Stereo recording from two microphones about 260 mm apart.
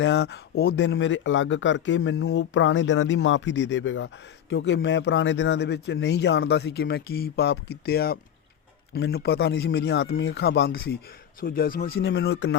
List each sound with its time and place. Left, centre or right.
0.0 s speech: left